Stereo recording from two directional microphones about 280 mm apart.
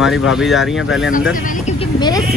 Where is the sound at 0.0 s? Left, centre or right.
Centre.